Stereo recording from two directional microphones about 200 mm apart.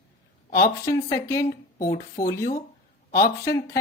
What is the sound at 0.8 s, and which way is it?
Speech, 15° left (ahead or behind).